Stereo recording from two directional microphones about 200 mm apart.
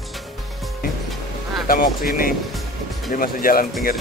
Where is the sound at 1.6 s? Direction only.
45° left (ahead or behind).